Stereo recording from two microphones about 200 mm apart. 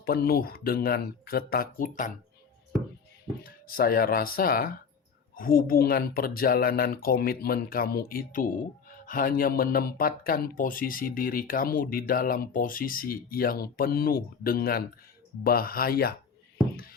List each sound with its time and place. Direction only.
0.0 s speech: 50° left (ahead or behind)
3.4 s speech: 45° left (ahead or behind)